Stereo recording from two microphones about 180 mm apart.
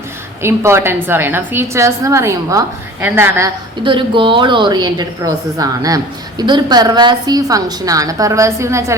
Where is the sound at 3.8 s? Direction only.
25° right (ahead or behind).